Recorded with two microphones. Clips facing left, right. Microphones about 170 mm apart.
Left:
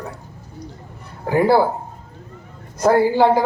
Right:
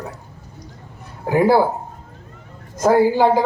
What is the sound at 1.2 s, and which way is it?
Speech, 15° right (ahead or behind).